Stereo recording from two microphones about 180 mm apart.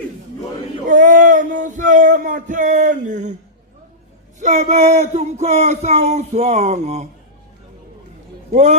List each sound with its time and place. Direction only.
0.9 s a sound: 45° right (ahead or behind)
4.4 s speech: 40° right (ahead or behind)
8.5 s speech: 40° right (ahead or behind)